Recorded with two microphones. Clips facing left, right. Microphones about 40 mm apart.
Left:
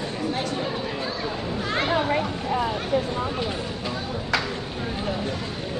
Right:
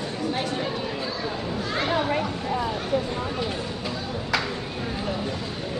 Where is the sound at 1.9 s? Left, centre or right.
Centre.